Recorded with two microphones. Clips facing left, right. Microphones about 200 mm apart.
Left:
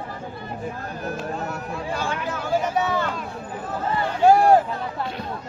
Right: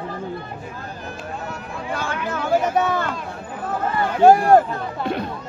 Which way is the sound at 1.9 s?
55° right (ahead or behind).